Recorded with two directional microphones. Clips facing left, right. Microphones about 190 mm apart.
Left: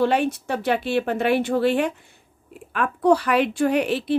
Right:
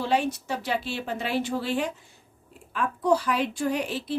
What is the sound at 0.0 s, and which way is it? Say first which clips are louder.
A woman's voice: left 5 dB; 60° left (ahead or behind).